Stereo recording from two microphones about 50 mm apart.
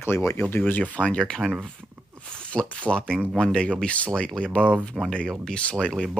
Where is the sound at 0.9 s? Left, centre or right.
Left.